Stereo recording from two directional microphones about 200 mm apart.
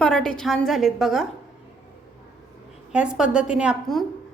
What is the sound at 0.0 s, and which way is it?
A woman's voice, 5° left (ahead or behind).